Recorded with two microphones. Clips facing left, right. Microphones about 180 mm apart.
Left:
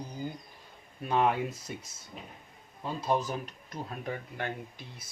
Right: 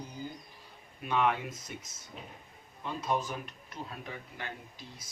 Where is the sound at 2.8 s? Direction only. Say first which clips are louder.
Left 3 dB; 35° left (ahead or behind); by 5.1 s 55° left (ahead or behind).